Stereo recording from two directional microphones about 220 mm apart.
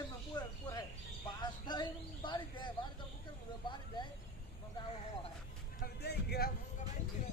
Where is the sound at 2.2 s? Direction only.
20° left (ahead or behind).